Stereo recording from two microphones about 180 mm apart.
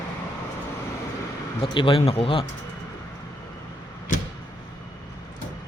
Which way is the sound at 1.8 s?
30° left (ahead or behind).